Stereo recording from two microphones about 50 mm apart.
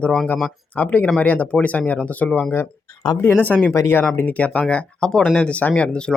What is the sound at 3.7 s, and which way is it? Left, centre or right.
Speech, left.